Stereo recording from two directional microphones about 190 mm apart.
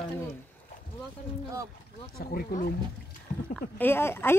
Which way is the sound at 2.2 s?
50° left (ahead or behind).